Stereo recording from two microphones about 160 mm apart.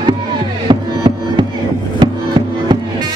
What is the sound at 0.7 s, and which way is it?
Music, 30° right (ahead or behind).